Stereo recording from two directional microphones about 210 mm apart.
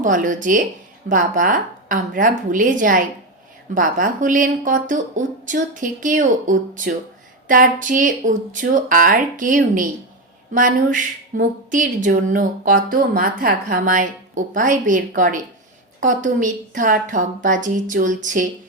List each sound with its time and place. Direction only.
0.0 s speech: 40° right (ahead or behind)